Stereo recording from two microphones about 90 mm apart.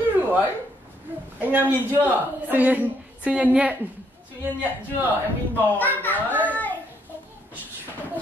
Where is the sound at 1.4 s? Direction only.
20° right (ahead or behind).